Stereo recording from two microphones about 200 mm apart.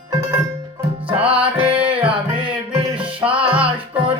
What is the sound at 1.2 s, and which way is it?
Music, 25° right (ahead or behind).